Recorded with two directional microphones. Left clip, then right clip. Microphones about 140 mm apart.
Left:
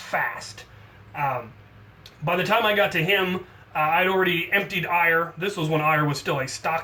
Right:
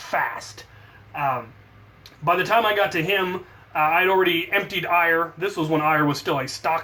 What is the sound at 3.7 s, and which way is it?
Speech, 30° right (ahead or behind).